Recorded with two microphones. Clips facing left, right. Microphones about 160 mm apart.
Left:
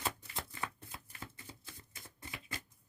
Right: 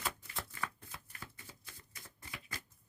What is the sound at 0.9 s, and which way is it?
Typewriter, 25° left (ahead or behind).